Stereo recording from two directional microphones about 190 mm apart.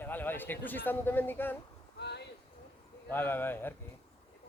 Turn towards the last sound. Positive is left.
turn(degrees=10)  # may be behind; listen again after turning